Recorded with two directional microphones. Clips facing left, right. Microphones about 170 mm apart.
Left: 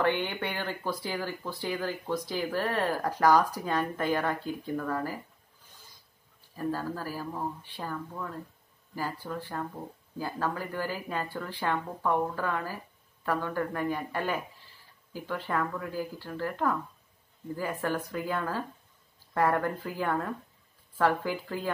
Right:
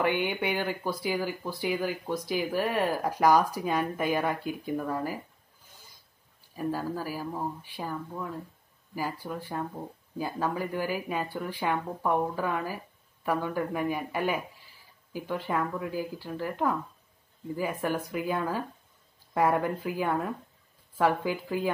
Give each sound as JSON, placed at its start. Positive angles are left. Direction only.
{"t": 0.0, "sound": "speech", "side_deg": -15}
{"t": 6.5, "sound": "speech", "side_deg": -10}